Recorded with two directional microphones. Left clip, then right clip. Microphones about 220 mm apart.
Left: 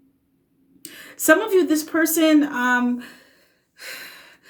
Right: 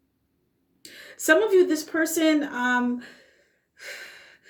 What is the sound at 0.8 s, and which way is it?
A woman's voice, 35° left (ahead or behind).